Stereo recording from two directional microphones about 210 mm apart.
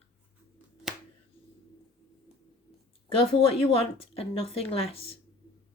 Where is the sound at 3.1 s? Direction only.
25° left (ahead or behind).